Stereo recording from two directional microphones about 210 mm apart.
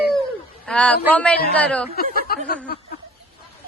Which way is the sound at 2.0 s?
45° left (ahead or behind).